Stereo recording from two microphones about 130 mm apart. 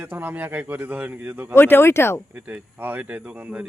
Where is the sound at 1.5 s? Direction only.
15° left (ahead or behind).